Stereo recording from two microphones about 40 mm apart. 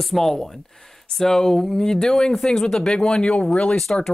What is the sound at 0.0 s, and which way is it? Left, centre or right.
Speech, centre.